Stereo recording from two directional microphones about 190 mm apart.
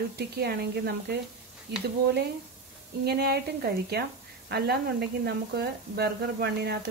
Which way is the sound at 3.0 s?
55° right (ahead or behind).